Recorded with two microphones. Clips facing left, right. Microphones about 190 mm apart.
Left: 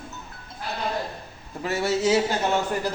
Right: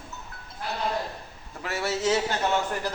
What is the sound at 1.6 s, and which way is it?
Speech, 15° left (ahead or behind).